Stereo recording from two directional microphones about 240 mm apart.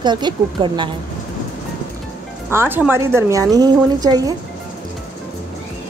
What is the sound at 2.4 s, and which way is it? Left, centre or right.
A woman's voice, centre.